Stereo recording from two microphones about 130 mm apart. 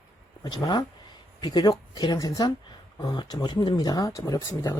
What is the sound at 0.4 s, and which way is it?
Speech, 30° left (ahead or behind).